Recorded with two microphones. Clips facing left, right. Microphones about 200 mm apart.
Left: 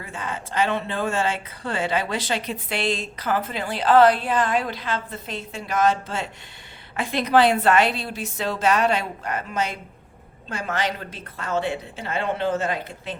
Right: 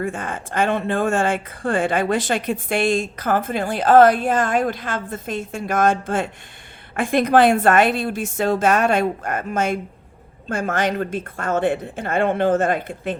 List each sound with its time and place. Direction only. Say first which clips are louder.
0.0 s speech: right 6 dB; 50° right (ahead or behind)